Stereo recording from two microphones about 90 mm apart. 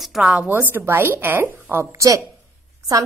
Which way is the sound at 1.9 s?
40° right (ahead or behind).